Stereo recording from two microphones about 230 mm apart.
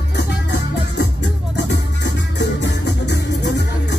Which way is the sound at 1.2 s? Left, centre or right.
Left.